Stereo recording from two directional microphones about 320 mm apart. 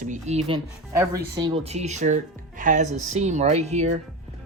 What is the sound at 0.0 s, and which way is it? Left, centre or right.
Speech, right.